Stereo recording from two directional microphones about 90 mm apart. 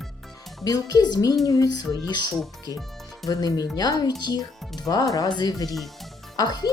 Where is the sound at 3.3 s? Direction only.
45° left (ahead or behind).